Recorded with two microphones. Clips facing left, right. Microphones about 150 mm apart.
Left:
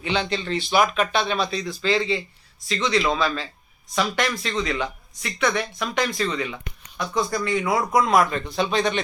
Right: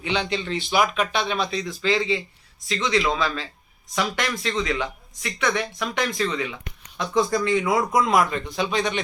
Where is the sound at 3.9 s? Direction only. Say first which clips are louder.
Left 2 dB; 20° left (ahead or behind).